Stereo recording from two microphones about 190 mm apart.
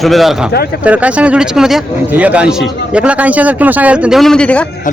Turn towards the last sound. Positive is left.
turn(degrees=5)  # may be behind; listen again after turning